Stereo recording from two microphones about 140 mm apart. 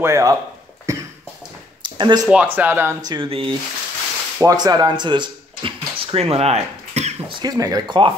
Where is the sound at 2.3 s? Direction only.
10° right (ahead or behind).